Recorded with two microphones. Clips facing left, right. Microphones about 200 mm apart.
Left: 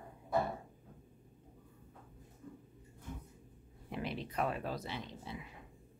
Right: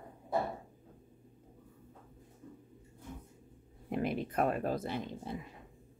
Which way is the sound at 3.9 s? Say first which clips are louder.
Right 7 dB; 50° right (ahead or behind).